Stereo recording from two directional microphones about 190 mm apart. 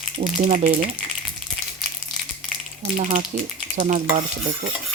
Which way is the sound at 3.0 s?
45° right (ahead or behind).